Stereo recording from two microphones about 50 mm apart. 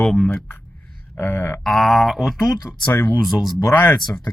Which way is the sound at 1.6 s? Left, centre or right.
Centre.